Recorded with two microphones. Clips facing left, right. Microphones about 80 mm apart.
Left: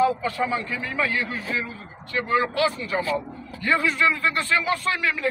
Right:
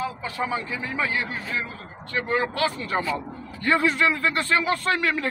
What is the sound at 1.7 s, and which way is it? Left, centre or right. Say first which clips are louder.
Speech: even; right.